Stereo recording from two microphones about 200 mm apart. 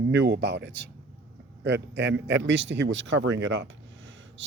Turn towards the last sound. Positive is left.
turn(degrees=-65)  # may be behind; listen again after turning